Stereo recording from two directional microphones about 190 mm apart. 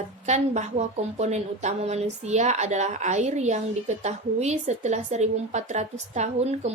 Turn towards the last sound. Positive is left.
turn(degrees=-35)  # may be behind; listen again after turning